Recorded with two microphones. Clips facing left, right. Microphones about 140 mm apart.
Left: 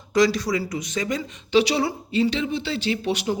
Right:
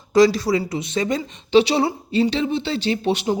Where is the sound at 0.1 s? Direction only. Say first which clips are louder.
Right 5 dB; 30° right (ahead or behind).